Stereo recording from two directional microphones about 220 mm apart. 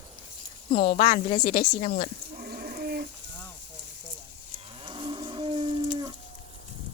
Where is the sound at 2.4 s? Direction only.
40° right (ahead or behind).